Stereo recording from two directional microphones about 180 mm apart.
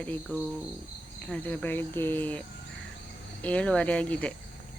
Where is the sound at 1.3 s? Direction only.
10° left (ahead or behind).